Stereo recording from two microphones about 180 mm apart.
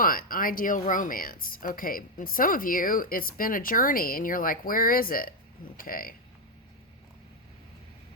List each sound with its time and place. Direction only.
0.0 s speech: 50° left (ahead or behind)